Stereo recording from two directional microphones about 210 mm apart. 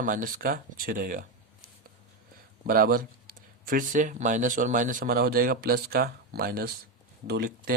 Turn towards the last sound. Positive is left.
turn(degrees=-50)  # may be behind; listen again after turning